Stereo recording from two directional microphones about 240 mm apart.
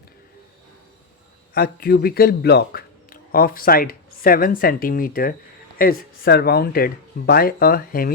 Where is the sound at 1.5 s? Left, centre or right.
Left.